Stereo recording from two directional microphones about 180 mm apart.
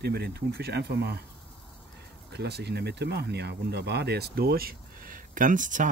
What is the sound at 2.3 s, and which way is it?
Speech, 70° right (ahead or behind).